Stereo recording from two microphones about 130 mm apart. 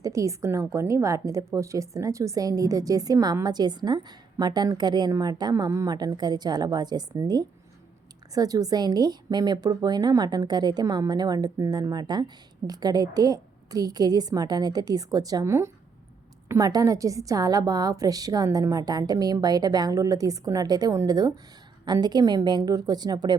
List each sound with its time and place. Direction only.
0.0 s a woman's voice: 25° right (ahead or behind)